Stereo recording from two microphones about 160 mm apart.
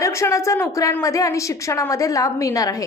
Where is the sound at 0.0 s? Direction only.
20° left (ahead or behind).